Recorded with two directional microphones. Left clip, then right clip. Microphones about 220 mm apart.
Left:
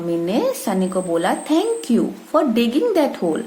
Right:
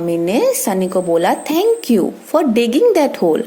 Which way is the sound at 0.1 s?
30° right (ahead or behind).